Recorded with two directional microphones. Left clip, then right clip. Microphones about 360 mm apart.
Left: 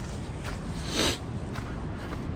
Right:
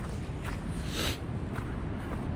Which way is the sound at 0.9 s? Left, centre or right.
Centre.